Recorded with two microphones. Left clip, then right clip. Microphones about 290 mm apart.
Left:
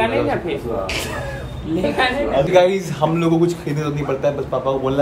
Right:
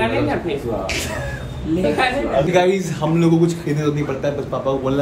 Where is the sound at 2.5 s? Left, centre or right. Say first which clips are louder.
Left 2 dB; centre.